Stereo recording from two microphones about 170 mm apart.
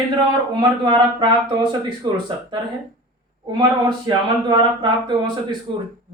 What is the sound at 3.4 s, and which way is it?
Speech, 25° right (ahead or behind).